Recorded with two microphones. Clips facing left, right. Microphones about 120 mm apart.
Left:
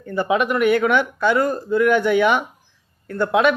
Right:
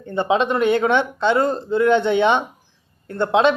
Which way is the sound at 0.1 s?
25° right (ahead or behind).